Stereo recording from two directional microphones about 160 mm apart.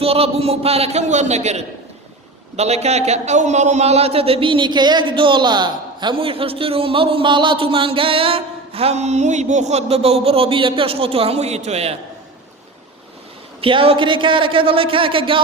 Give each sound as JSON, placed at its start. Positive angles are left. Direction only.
{"t": 0.0, "sound": "a man's voice", "side_deg": -40}
{"t": 13.6, "sound": "a man's voice", "side_deg": -35}